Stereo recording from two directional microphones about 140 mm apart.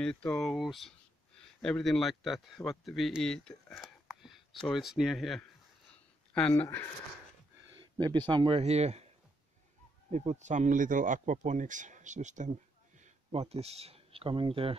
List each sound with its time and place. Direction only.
0.0 s speech: 5° left (ahead or behind)
7.7 s speech: 30° right (ahead or behind); by 9.0 s 50° right (ahead or behind)
10.1 s speech: 55° right (ahead or behind)
13.0 s speech: 50° right (ahead or behind)